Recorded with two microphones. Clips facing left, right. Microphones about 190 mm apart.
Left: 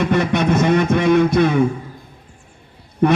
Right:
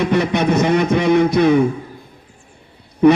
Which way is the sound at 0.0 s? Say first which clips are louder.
Right 1 dB; 55° left (ahead or behind).